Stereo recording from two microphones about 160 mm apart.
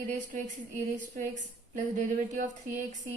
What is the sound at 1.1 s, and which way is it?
Speech, 50° right (ahead or behind).